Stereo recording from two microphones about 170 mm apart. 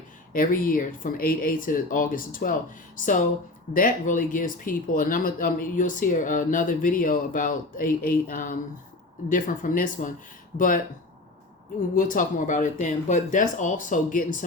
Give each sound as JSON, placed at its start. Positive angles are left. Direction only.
{"t": 0.3, "sound": "speech", "side_deg": 55}
{"t": 11.9, "sound": "speech", "side_deg": 50}